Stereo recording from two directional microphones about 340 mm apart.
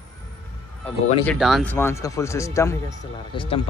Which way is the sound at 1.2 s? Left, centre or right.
Centre.